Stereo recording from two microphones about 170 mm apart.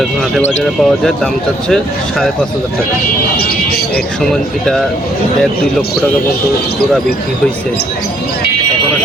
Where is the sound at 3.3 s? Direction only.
65° left (ahead or behind).